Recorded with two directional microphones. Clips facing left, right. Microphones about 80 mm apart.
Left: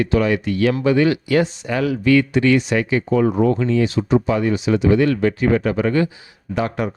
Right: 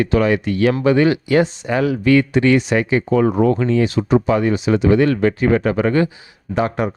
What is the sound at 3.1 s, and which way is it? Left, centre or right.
Speech, right.